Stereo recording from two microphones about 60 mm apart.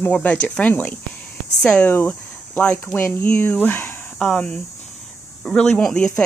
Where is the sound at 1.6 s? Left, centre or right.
Centre; by 3.9 s left.